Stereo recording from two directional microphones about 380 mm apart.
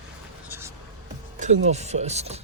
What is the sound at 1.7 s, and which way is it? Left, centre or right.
Speech, centre.